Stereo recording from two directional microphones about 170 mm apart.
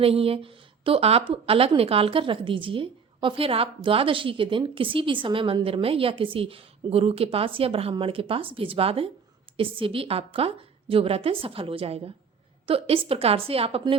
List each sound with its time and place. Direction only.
0.0 s a woman's voice: 35° right (ahead or behind)